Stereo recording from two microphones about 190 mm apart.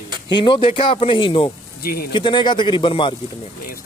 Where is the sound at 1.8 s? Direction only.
55° left (ahead or behind).